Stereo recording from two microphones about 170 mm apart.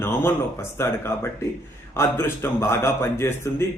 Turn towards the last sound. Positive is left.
turn(degrees=15)  # may be behind; listen again after turning